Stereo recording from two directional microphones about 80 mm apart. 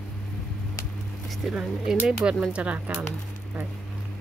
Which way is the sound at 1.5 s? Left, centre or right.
Centre.